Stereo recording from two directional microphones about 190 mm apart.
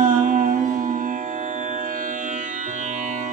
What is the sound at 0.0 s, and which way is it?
Music, 45° right (ahead or behind).